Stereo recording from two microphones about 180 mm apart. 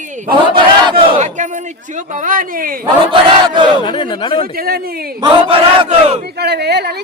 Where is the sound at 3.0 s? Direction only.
25° right (ahead or behind).